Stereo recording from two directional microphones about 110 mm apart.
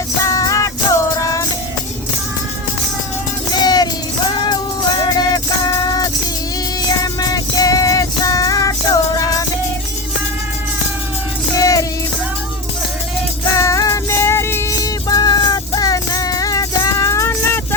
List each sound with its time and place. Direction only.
0.2 s music: 30° left (ahead or behind)
3.5 s music: 40° left (ahead or behind)
11.5 s music: 30° left (ahead or behind)
13.5 s music: 30° left (ahead or behind)
14.8 s music: 35° left (ahead or behind)